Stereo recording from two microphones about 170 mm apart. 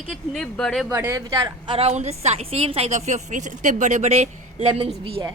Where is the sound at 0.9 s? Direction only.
15° right (ahead or behind); by 5.3 s 35° right (ahead or behind).